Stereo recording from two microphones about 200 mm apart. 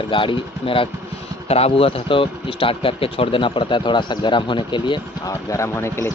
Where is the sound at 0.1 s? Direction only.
25° left (ahead or behind).